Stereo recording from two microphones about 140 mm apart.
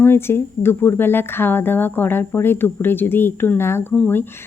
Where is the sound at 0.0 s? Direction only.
15° left (ahead or behind).